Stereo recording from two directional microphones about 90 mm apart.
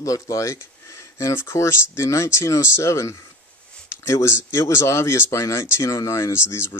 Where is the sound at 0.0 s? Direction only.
35° left (ahead or behind).